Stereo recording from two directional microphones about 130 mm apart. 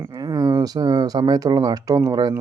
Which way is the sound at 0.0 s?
25° right (ahead or behind).